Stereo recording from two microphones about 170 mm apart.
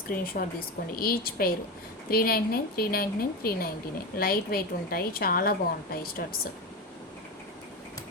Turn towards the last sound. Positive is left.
turn(degrees=65)  # may be behind; listen again after turning